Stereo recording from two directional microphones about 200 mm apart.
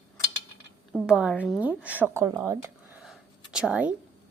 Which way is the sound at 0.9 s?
5° right (ahead or behind).